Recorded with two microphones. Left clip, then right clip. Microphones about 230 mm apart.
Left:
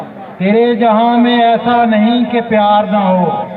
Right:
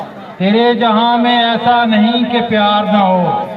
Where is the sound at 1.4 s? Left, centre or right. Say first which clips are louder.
Left 1 dB; right.